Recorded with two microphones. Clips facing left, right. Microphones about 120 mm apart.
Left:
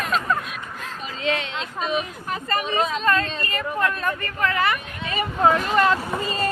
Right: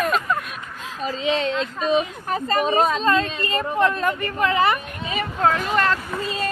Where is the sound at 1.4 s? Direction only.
40° right (ahead or behind).